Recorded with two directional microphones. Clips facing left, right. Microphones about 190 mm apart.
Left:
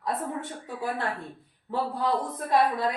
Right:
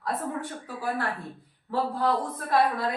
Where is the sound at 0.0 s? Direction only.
25° left (ahead or behind).